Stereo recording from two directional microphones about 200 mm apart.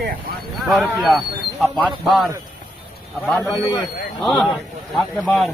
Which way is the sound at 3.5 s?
20° left (ahead or behind).